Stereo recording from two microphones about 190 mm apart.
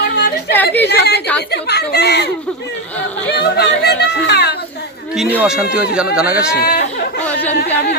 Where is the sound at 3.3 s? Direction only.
60° left (ahead or behind).